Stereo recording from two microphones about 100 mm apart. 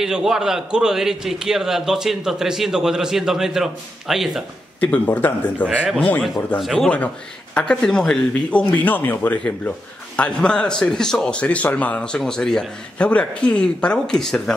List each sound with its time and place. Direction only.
0.0 s a man's voice: 5° right (ahead or behind)
4.7 s speech: 15° left (ahead or behind)
6.6 s a man's voice: centre (ahead or behind)